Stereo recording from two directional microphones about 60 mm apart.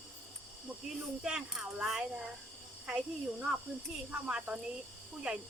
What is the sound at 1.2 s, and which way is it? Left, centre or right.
Speech, centre.